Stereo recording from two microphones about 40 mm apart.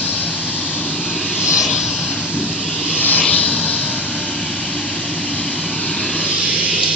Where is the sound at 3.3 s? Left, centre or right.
Left.